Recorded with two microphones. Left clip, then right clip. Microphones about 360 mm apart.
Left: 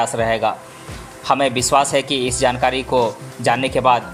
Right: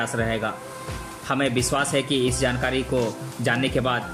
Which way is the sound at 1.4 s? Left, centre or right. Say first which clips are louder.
Left 6 dB; centre.